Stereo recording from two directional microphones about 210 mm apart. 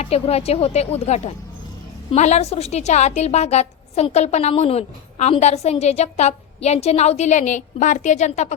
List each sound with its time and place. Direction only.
0.0 s a woman's voice: 30° left (ahead or behind)